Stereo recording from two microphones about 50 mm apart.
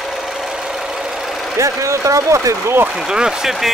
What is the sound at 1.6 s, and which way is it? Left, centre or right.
Speech, right.